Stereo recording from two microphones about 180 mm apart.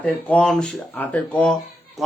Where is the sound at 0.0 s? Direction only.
10° left (ahead or behind).